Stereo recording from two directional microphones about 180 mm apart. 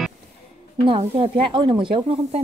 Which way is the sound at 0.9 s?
30° right (ahead or behind).